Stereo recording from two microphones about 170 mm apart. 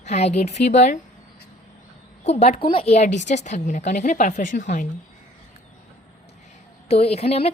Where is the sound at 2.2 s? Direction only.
40° left (ahead or behind).